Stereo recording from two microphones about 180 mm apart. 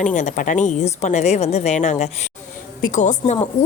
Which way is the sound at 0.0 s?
45° left (ahead or behind).